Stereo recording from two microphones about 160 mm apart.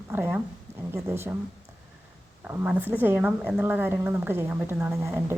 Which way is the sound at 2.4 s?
10° right (ahead or behind).